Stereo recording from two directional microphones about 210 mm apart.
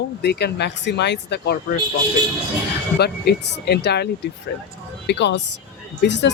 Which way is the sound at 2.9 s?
50° left (ahead or behind).